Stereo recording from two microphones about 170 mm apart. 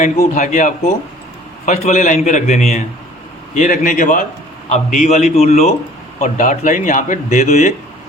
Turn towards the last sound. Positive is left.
turn(degrees=45)  # may be behind; listen again after turning